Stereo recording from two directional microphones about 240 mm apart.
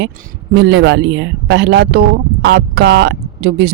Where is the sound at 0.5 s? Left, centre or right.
Right.